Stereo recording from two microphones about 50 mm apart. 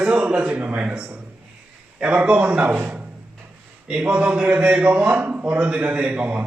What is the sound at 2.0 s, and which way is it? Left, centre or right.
Speech, right.